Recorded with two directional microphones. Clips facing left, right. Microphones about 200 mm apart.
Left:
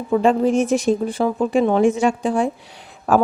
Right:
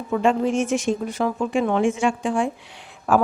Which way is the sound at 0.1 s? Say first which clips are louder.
Left 4 dB; 35° left (ahead or behind).